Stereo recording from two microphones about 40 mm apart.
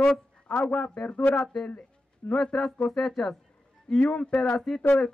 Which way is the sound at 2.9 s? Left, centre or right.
Centre.